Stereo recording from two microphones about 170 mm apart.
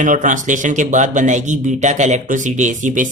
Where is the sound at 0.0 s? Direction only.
50° right (ahead or behind).